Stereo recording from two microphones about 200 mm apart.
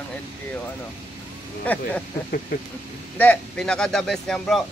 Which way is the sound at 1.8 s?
45° left (ahead or behind).